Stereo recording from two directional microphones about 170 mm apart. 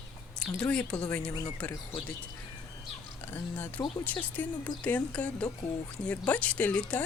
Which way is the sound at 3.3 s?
10° left (ahead or behind).